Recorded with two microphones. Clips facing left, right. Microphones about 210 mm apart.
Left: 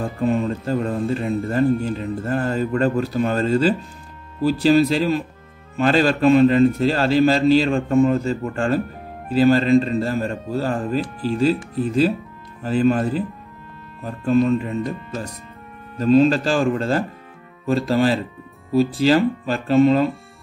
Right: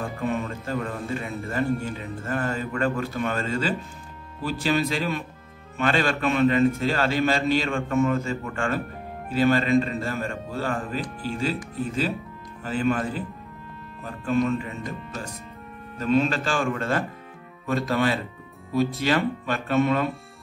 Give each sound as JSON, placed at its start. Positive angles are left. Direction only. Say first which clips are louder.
{"t": 0.2, "sound": "a man's voice", "louder": "left 9 dB", "side_deg": 35}
{"t": 12.6, "sound": "a man's voice", "louder": "left 6 dB", "side_deg": 35}
{"t": 16.0, "sound": "a man's voice", "louder": "left 8 dB", "side_deg": 35}